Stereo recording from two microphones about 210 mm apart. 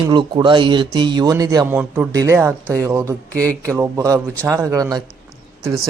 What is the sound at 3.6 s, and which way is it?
Speech, 15° right (ahead or behind).